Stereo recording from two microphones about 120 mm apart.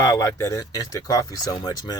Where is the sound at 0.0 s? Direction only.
25° left (ahead or behind).